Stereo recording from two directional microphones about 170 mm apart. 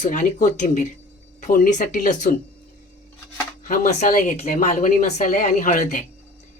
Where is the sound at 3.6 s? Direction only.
45° left (ahead or behind).